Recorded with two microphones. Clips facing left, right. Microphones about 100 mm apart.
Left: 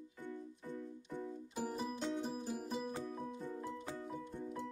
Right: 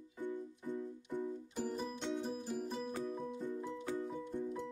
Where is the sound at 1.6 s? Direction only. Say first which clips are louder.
Even; 5° left (ahead or behind).